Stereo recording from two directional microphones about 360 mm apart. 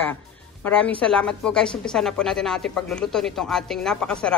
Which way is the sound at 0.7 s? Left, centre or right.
Centre.